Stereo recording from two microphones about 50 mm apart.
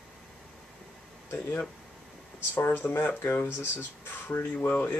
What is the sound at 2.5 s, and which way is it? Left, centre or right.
Speech, left.